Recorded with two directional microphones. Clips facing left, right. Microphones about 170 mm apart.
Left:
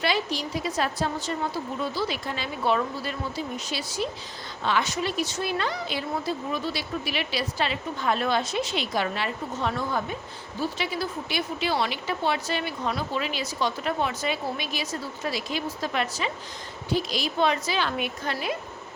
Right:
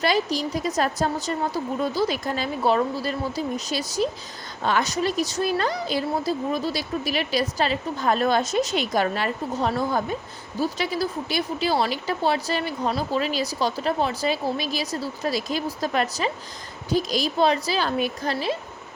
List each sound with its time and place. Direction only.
0.0 s speech: 40° right (ahead or behind)